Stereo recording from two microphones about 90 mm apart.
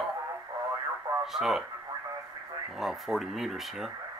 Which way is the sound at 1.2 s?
5° right (ahead or behind).